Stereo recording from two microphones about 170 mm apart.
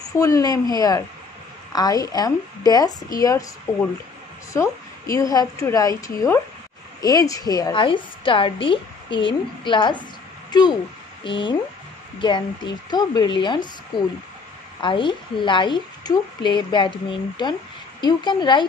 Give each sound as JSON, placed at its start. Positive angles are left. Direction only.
{"t": 0.2, "sound": "a woman's voice", "side_deg": 20}
{"t": 5.1, "sound": "a woman's voice", "side_deg": 20}